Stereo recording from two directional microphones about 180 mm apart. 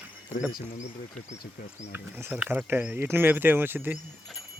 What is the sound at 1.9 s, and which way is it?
Speech, 10° right (ahead or behind).